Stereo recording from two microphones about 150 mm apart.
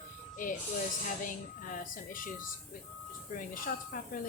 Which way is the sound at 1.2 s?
65° left (ahead or behind).